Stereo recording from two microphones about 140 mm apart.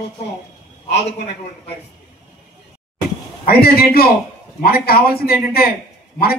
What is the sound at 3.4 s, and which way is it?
Speech, 90° left.